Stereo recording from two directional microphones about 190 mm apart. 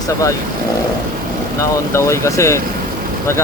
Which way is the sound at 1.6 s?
15° left (ahead or behind).